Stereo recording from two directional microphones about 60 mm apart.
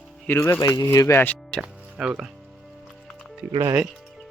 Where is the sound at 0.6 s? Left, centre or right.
Left.